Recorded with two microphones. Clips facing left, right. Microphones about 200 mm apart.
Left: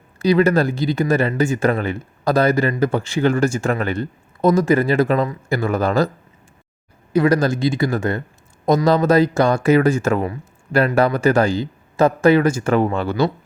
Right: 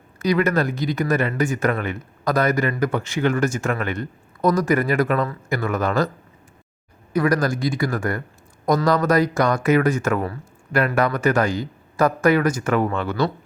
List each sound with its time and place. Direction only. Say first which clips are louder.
0.2 s speech: left 4 dB; 30° left (ahead or behind)
7.1 s speech: left 4 dB; 25° left (ahead or behind)